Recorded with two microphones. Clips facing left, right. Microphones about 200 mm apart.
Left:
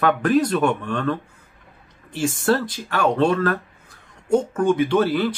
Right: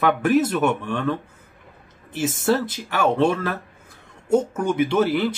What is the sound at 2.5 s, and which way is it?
Speech, 10° right (ahead or behind).